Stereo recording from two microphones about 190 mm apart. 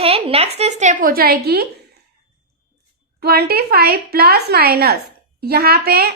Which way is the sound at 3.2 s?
55° right (ahead or behind).